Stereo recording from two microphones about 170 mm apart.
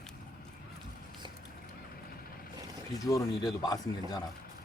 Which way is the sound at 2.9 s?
20° left (ahead or behind).